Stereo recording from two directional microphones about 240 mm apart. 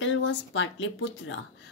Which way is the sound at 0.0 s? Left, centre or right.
Left.